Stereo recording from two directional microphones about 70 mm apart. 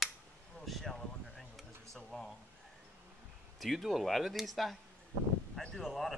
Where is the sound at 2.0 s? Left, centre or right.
Centre.